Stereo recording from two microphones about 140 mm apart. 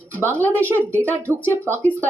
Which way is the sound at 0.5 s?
15° right (ahead or behind).